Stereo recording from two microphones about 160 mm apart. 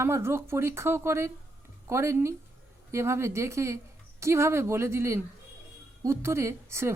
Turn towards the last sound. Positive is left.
turn(degrees=-15)  # may be behind; listen again after turning